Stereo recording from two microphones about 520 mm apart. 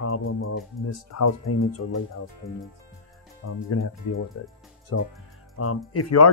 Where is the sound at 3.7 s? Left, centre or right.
Left.